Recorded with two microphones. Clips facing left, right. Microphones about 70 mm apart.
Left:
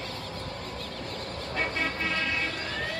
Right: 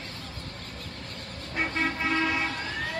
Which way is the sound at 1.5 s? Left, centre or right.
Centre.